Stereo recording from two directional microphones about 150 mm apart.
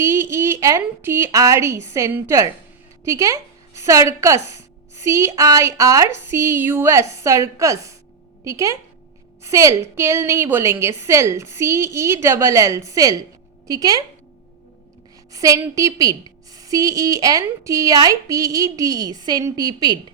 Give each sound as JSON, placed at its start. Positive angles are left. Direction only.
{"t": 0.0, "sound": "a woman's voice", "side_deg": -15}
{"t": 15.3, "sound": "a woman's voice", "side_deg": -20}